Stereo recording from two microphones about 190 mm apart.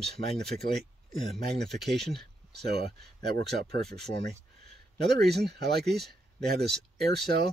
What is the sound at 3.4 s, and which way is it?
Speech, 60° right (ahead or behind).